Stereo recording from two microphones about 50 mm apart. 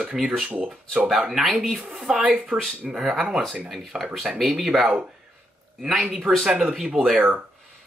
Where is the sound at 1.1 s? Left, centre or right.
Centre.